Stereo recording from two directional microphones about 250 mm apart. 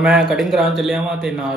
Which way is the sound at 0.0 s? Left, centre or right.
Centre.